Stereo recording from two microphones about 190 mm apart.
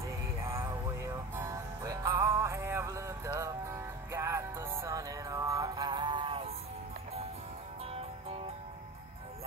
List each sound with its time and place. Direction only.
0.0 s music: 15° right (ahead or behind)